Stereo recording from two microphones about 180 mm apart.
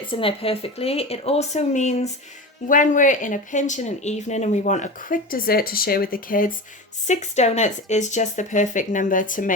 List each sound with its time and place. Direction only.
0.1 s speech: 30° left (ahead or behind); by 6.5 s 50° left (ahead or behind)
7.1 s speech: 40° left (ahead or behind)